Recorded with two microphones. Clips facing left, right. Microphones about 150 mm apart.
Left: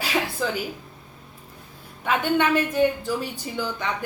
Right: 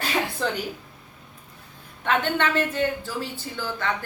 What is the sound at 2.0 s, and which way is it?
A woman's voice, 10° left (ahead or behind).